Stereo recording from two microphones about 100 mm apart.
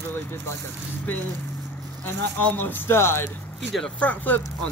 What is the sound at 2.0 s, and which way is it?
Speech, 20° left (ahead or behind).